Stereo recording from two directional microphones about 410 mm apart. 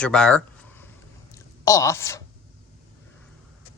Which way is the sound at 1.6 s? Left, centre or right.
Centre.